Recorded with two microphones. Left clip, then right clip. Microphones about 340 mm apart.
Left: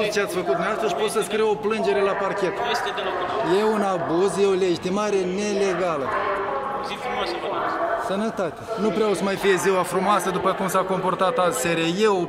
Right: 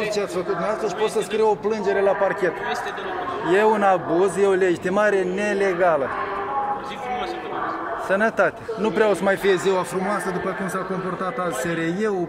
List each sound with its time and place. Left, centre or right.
1.1 s a man's voice: centre
8.1 s speech: right; by 10.2 s centre